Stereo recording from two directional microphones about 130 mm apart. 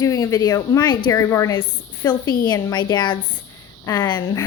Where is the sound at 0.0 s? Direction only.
25° left (ahead or behind).